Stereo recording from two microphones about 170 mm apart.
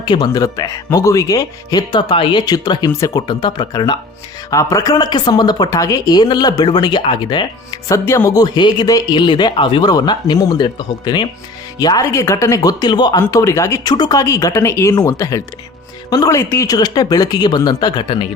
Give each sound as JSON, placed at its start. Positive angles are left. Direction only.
{"t": 0.0, "sound": "speech", "side_deg": 25}